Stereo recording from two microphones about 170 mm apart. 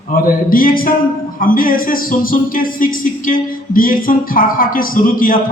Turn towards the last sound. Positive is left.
turn(degrees=55)  # may be behind; listen again after turning